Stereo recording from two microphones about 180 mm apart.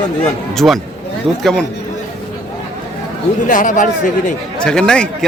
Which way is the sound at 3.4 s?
45° left (ahead or behind).